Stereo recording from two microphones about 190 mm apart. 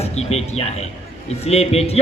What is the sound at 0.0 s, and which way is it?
A man's voice, 35° left (ahead or behind).